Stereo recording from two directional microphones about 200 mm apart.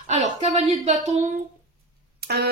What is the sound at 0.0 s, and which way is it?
Speech, 30° right (ahead or behind).